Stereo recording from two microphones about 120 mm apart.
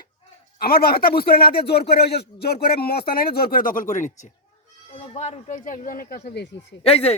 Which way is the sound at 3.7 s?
90° left.